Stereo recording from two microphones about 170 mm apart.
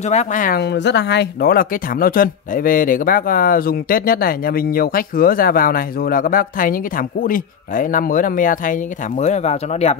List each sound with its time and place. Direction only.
0.0 s speech: 45° left (ahead or behind)
0.6 s speech: 90° left; by 9.9 s 40° left (ahead or behind)